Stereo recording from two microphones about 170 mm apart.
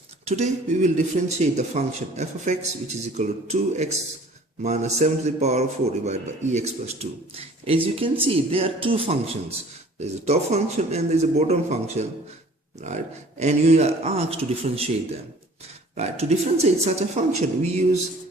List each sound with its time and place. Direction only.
0.3 s speech: 45° right (ahead or behind)
13.4 s speech: 40° right (ahead or behind)
16.0 s speech: 40° right (ahead or behind)